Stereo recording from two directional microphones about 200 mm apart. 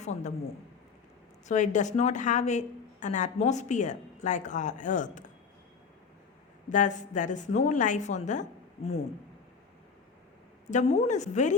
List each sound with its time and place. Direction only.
0.0 s speech: 35° left (ahead or behind)
1.5 s speech: 35° left (ahead or behind)
6.7 s speech: 40° left (ahead or behind)
10.7 s speech: 35° left (ahead or behind)